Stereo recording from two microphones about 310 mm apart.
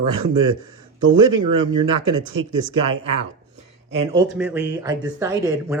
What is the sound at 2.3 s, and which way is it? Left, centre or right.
Speech, right.